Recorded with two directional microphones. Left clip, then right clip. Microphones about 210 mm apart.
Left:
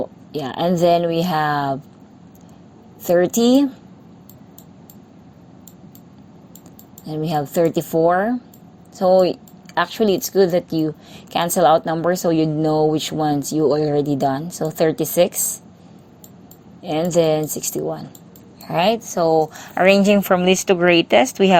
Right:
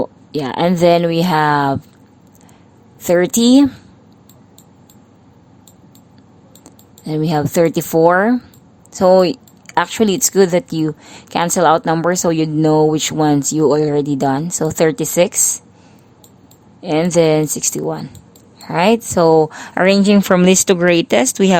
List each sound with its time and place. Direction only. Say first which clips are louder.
0.0 s speech: right 5 dB; 15° right (ahead or behind)
3.0 s a woman's voice: right 2 dB; 20° right (ahead or behind)
7.0 s a woman's voice: right 5 dB; 15° right (ahead or behind)
16.8 s a woman's voice: right 4 dB; 15° right (ahead or behind)
18.9 s a woman's voice: right 6 dB; 30° right (ahead or behind)
19.3 s a woman's voice: right 4 dB; 55° right (ahead or behind)
19.7 s a woman's voice: even; 30° right (ahead or behind)